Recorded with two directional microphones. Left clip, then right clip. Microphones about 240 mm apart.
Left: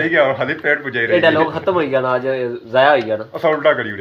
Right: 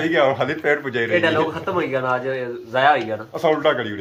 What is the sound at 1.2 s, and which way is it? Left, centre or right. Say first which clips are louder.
A man's voice: left 5 dB; left.